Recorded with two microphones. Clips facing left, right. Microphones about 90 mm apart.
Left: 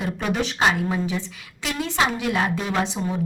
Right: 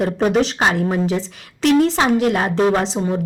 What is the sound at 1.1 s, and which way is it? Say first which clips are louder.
A woman's voice: right 7 dB; 70° right (ahead or behind).